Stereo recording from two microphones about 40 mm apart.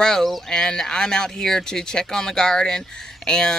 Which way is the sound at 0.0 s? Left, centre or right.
Centre.